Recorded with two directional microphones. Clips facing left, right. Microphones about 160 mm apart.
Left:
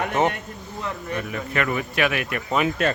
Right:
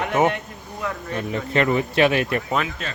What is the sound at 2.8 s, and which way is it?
Speech, 70° left (ahead or behind).